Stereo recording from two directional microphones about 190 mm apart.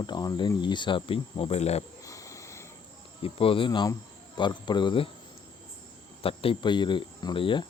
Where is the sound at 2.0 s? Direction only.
15° left (ahead or behind).